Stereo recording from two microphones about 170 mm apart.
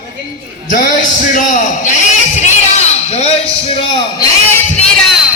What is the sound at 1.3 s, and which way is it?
A man's voice, 50° left (ahead or behind).